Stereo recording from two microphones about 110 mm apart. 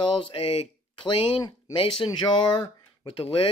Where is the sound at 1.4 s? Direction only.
40° left (ahead or behind).